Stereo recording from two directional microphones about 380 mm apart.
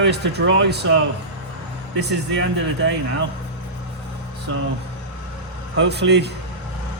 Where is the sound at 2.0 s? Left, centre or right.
Right.